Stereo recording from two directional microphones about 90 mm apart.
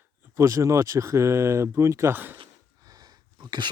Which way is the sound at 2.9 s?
45° right (ahead or behind).